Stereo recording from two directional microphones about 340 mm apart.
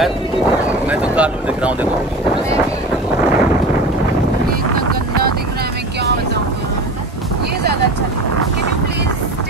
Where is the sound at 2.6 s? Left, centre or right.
Centre.